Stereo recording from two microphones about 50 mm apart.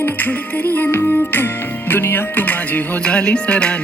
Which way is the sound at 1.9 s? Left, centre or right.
Left.